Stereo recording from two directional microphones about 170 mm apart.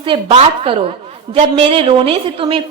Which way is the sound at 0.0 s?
30° right (ahead or behind).